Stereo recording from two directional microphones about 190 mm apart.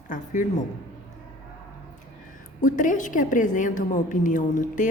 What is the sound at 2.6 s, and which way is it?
A woman's voice, 45° left (ahead or behind).